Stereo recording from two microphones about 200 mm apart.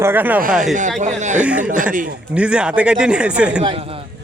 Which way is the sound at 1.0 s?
35° right (ahead or behind).